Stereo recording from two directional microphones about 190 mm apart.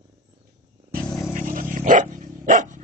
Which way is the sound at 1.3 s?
45° right (ahead or behind).